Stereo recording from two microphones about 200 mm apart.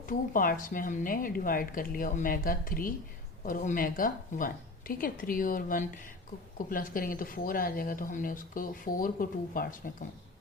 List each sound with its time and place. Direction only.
0.1 s speech: 45° left (ahead or behind)